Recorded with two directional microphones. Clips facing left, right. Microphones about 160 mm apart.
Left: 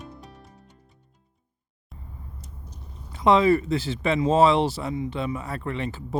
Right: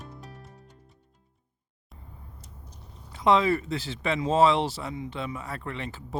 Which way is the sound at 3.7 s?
15° left (ahead or behind).